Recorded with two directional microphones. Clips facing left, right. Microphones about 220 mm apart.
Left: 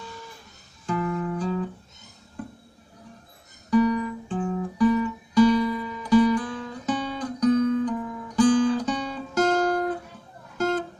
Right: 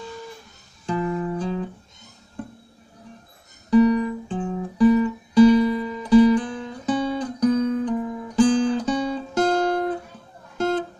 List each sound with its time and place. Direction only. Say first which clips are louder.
0.8 s music: right 2 dB; 20° right (ahead or behind)
3.7 s guitar: right 4 dB; 25° right (ahead or behind)